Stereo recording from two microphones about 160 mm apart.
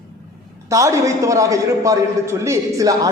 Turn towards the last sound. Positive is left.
turn(degrees=-20)  # may be behind; listen again after turning